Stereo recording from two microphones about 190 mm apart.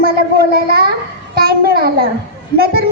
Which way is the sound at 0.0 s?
55° right (ahead or behind).